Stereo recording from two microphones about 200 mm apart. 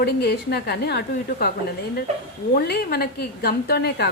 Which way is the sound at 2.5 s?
50° left (ahead or behind).